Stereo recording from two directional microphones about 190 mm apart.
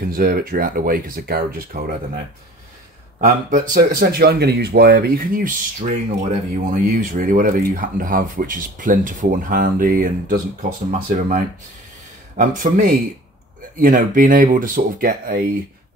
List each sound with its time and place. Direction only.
0.0 s speech: 50° right (ahead or behind)
3.2 s speech: 45° right (ahead or behind)